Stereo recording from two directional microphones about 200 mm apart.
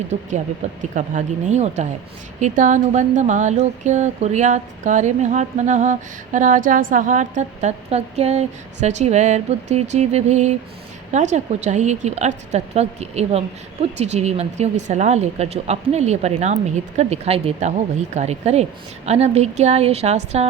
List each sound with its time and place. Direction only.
0.8 s speech: 40° right (ahead or behind)